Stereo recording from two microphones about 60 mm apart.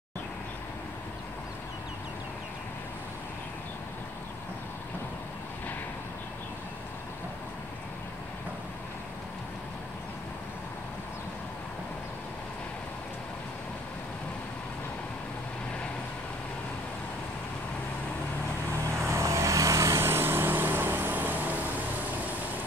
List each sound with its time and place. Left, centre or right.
18.9 s vehicle: right